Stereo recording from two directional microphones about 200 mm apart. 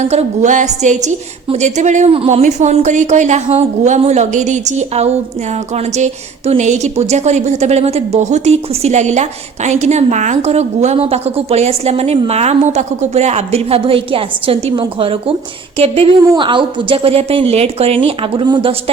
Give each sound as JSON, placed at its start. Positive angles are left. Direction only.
{"t": 0.0, "sound": "a woman's voice", "side_deg": -35}
{"t": 16.3, "sound": "a woman's voice", "side_deg": -25}